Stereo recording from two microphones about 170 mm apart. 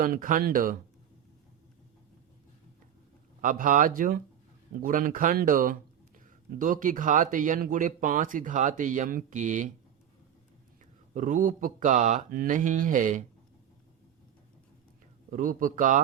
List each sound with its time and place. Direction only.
0.0 s a man's voice: 55° right (ahead or behind)
3.4 s a man's voice: 50° right (ahead or behind)
11.1 s a man's voice: 50° right (ahead or behind)
15.3 s a man's voice: 50° right (ahead or behind)